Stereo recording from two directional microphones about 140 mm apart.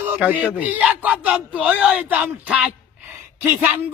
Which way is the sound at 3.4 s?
15° right (ahead or behind).